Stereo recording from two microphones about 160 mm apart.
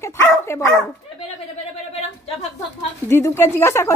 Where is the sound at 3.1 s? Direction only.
15° left (ahead or behind).